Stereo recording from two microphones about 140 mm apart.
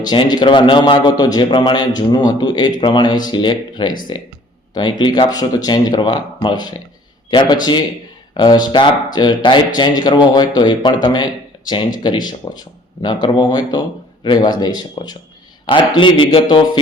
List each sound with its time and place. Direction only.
0.0 s speech: 30° left (ahead or behind)